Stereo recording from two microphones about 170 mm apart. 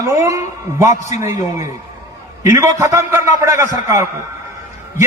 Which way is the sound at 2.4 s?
15° right (ahead or behind).